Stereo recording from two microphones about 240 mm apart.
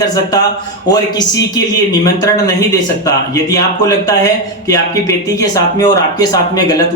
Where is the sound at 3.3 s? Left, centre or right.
Centre.